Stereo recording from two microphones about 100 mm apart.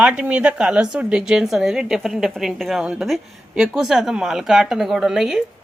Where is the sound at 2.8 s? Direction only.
10° right (ahead or behind).